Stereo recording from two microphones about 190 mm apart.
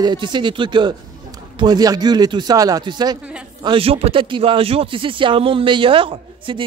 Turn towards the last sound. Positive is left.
turn(degrees=-30)  # may be behind; listen again after turning